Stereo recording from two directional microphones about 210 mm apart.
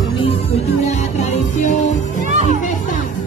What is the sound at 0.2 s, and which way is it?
Music, 30° left (ahead or behind).